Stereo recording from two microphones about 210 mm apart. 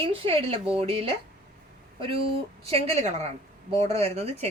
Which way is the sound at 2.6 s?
30° right (ahead or behind).